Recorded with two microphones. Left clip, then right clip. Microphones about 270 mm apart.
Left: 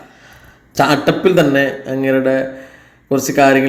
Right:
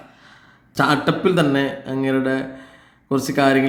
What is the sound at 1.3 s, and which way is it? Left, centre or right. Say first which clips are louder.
Speech: left 7 dB; centre.